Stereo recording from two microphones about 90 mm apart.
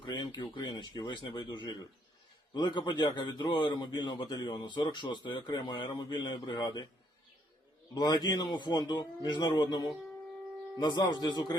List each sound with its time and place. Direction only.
0.0 s a man's voice: 55° left (ahead or behind)
7.9 s a man's voice: 50° left (ahead or behind)